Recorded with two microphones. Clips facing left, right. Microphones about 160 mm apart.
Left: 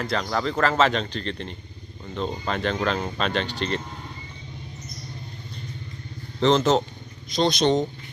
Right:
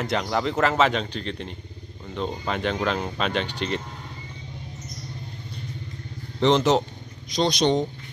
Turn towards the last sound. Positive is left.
turn(degrees=-15)  # may be behind; listen again after turning